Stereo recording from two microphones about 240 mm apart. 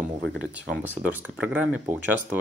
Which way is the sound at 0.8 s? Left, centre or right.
Centre.